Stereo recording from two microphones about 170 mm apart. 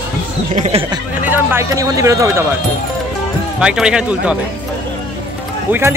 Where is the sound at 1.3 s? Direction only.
15° right (ahead or behind).